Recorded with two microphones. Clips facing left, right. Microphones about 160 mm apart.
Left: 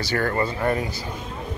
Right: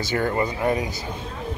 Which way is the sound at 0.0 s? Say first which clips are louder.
Even; 20° right (ahead or behind).